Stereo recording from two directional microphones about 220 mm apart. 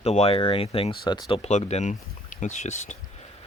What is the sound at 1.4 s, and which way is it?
Speech, 30° left (ahead or behind).